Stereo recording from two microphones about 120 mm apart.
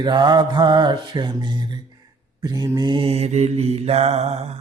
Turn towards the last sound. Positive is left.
turn(degrees=-60)  # may be behind; listen again after turning